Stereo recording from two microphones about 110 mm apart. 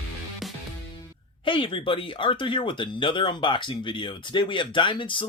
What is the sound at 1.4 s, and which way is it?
Speech, 50° left (ahead or behind).